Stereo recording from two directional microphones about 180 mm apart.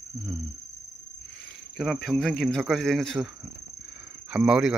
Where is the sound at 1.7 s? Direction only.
Centre (ahead or behind).